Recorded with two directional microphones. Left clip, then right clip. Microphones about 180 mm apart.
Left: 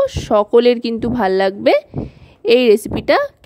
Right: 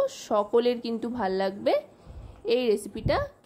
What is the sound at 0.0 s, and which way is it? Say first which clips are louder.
Speech: left 11 dB; 40° left (ahead or behind).